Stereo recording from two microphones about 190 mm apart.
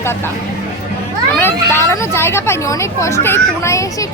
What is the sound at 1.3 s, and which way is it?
Speech, 10° left (ahead or behind).